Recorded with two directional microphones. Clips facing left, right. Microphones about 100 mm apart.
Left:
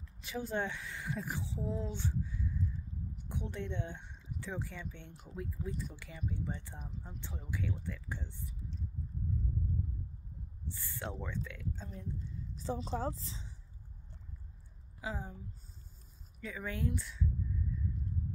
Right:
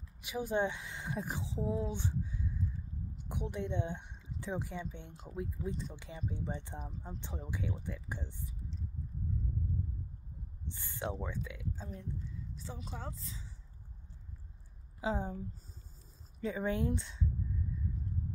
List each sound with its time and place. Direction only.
0.2 s speech: 15° right (ahead or behind)
10.7 s speech: 20° right (ahead or behind)
12.6 s speech: 30° left (ahead or behind)
15.0 s a woman's voice: 25° right (ahead or behind)
16.3 s speech: 30° right (ahead or behind)